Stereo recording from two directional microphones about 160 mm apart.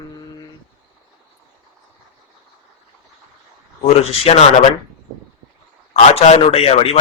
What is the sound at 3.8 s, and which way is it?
Speech, 40° left (ahead or behind).